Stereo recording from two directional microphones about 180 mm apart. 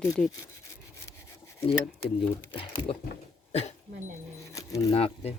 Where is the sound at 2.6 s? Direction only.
30° left (ahead or behind).